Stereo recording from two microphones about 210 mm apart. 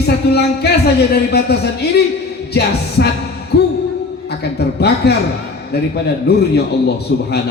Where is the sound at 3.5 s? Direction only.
50° left (ahead or behind).